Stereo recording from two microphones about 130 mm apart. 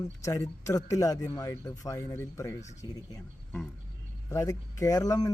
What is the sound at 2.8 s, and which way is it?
Speech, 35° left (ahead or behind).